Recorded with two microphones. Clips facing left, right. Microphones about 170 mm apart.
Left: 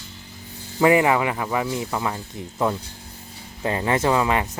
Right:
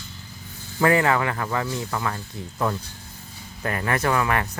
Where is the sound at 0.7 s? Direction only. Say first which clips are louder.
Left 3 dB; 15° left (ahead or behind).